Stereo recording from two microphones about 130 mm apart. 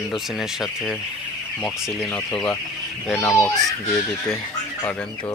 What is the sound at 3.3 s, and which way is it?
Speech, 20° left (ahead or behind).